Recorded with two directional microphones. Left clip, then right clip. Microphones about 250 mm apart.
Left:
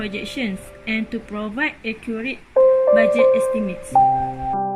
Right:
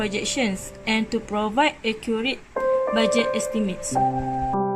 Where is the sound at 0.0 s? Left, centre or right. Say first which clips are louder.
Right 2 dB; centre.